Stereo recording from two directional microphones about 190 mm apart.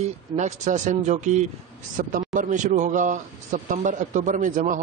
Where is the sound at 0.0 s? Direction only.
35° right (ahead or behind).